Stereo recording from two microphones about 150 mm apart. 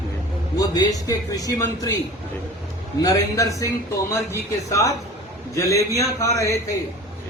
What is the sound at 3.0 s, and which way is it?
A man's voice, 20° left (ahead or behind).